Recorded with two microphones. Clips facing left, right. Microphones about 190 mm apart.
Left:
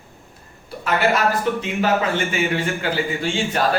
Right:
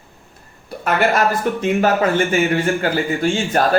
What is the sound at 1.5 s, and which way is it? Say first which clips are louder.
Speech: right 3 dB; 45° right (ahead or behind).